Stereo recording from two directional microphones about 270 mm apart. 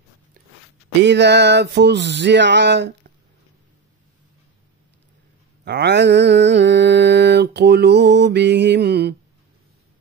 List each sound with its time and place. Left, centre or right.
1.0 s mantra: right
5.7 s mantra: right